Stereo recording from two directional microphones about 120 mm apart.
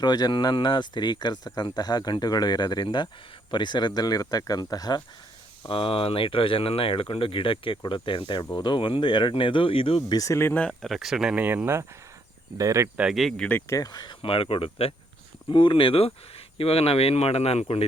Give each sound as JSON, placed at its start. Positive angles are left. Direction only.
{"t": 0.0, "sound": "speech", "side_deg": 35}
{"t": 5.6, "sound": "speech", "side_deg": 50}
{"t": 10.1, "sound": "speech", "side_deg": 30}
{"t": 10.8, "sound": "speech", "side_deg": 0}
{"t": 13.0, "sound": "speech", "side_deg": -5}
{"t": 13.6, "sound": "speech", "side_deg": 25}